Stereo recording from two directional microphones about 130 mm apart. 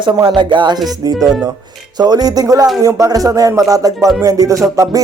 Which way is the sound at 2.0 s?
30° right (ahead or behind).